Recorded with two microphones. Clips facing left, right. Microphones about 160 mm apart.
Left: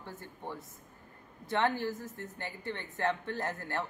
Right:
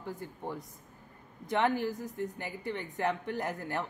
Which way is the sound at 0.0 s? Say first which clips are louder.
Right 4 dB; 15° right (ahead or behind).